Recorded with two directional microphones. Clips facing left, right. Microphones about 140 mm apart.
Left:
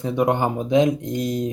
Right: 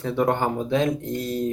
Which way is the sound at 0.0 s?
15° left (ahead or behind).